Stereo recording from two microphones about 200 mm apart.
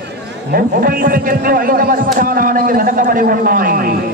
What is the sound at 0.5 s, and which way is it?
A man's voice, 45° right (ahead or behind).